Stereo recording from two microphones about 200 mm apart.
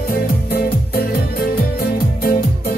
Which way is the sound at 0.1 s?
50° left (ahead or behind).